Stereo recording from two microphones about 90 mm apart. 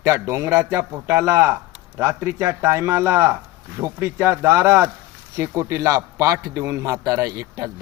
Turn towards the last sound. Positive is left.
turn(degrees=-35)  # may be behind; listen again after turning